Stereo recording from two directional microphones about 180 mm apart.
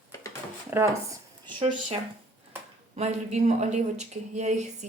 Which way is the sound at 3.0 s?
40° right (ahead or behind).